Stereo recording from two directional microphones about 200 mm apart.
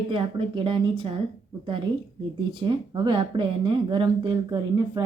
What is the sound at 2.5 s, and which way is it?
Speech, 25° right (ahead or behind).